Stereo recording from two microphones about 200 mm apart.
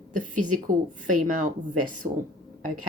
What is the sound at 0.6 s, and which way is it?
A woman's voice, 40° right (ahead or behind).